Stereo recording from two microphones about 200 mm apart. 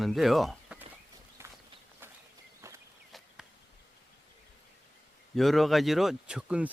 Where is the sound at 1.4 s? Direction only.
10° right (ahead or behind).